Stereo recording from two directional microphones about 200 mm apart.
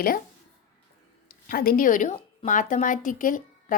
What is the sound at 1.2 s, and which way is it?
A woman's voice, 45° left (ahead or behind).